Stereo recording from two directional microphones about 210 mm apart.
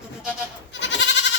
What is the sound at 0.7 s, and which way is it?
Goat, 60° left (ahead or behind).